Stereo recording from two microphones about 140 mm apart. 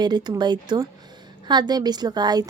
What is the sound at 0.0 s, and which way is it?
A woman's voice, 30° right (ahead or behind).